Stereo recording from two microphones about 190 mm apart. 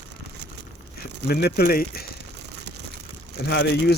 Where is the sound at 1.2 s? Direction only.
55° left (ahead or behind).